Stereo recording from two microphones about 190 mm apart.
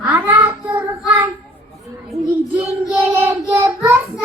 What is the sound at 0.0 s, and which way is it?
Child singing, 5° right (ahead or behind).